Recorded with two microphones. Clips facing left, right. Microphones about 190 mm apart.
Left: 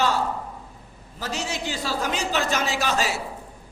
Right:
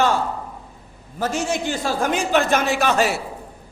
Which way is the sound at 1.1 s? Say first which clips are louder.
Right 7 dB; 50° right (ahead or behind).